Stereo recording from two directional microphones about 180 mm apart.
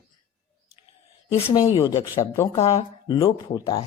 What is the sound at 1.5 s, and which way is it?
Speech, 25° left (ahead or behind).